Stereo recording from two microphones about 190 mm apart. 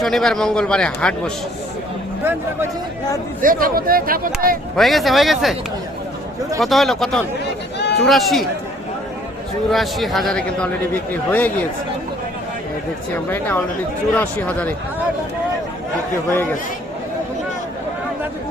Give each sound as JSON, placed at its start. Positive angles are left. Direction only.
{"t": 0.0, "sound": "a man's voice", "side_deg": 0}
{"t": 2.2, "sound": "speech", "side_deg": -10}
{"t": 3.4, "sound": "speech", "side_deg": -50}
{"t": 4.8, "sound": "a man's voice", "side_deg": 0}
{"t": 6.6, "sound": "a man's voice", "side_deg": 0}
{"t": 9.6, "sound": "a man's voice", "side_deg": 0}
{"t": 13.1, "sound": "speech", "side_deg": 10}